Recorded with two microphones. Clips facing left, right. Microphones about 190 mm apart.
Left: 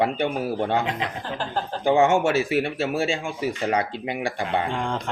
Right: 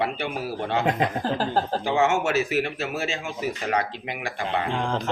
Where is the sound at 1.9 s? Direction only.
35° left (ahead or behind).